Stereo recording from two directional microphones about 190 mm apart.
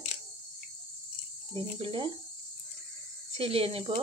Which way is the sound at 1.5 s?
30° right (ahead or behind).